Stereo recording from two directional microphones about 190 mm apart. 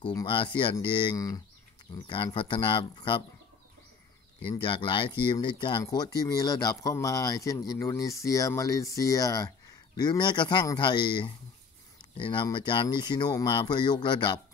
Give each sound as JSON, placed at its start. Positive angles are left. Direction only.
{"t": 0.1, "sound": "speech", "side_deg": 25}
{"t": 4.4, "sound": "speech", "side_deg": 25}